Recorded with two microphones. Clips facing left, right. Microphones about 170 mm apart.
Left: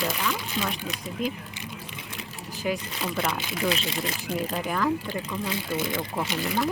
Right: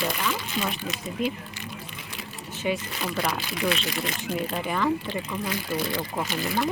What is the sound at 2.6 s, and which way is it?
Speech, centre (ahead or behind).